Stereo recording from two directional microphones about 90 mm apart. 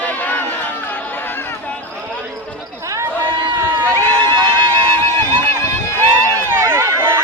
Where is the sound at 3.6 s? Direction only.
25° right (ahead or behind).